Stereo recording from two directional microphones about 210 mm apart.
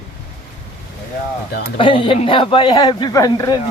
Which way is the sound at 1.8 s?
25° left (ahead or behind).